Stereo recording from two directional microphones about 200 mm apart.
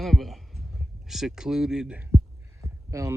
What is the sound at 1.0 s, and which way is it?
Speech, centre (ahead or behind).